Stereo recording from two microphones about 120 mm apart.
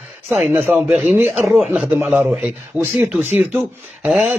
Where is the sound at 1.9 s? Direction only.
10° right (ahead or behind).